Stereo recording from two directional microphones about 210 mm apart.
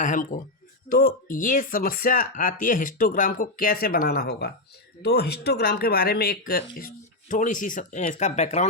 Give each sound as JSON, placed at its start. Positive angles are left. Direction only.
{"t": 0.0, "sound": "speech", "side_deg": 40}